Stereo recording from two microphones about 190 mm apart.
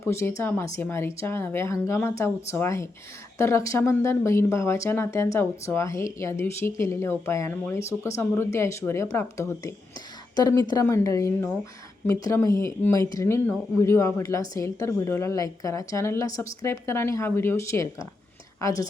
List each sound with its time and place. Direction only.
0.0 s speech: 15° left (ahead or behind)